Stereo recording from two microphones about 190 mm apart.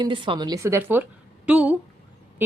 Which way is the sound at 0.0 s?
25° right (ahead or behind).